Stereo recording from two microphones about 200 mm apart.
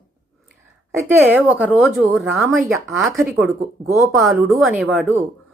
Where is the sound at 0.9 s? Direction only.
10° right (ahead or behind).